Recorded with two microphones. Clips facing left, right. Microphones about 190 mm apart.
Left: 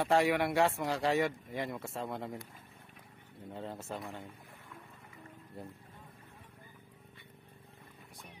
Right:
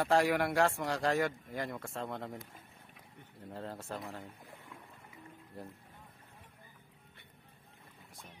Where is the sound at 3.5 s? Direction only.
Centre (ahead or behind).